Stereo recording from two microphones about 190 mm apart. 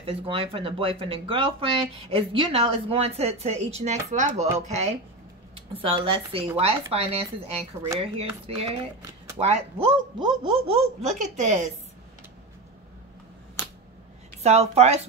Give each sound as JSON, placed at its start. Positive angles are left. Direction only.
{"t": 0.0, "sound": "speech", "side_deg": -30}
{"t": 14.4, "sound": "speech", "side_deg": -35}